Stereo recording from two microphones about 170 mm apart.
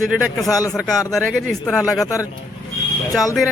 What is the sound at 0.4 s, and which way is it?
Speech, 20° left (ahead or behind).